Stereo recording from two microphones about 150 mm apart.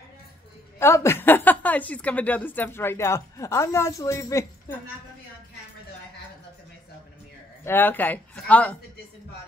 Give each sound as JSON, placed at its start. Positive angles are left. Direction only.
{"t": 0.7, "sound": "a woman's voice", "side_deg": 15}
{"t": 7.6, "sound": "a woman's voice", "side_deg": 15}